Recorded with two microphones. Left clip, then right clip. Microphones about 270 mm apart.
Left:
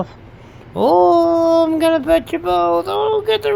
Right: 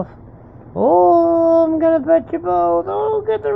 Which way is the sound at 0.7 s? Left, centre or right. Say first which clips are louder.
Even; left.